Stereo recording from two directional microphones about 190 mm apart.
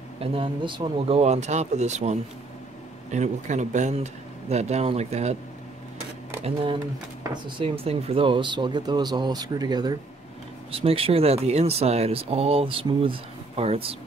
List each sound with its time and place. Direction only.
0.2 s speech: 30° right (ahead or behind)
6.4 s speech: 25° right (ahead or behind)